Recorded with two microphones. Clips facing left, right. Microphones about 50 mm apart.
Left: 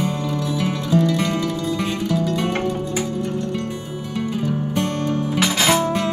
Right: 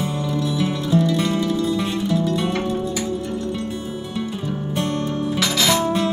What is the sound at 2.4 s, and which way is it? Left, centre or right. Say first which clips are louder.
Music: even; left.